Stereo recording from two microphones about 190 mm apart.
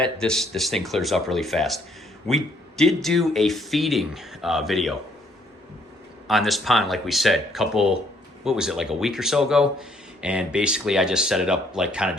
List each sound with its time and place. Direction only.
0.0 s speech: 5° left (ahead or behind)
6.2 s speech: centre (ahead or behind)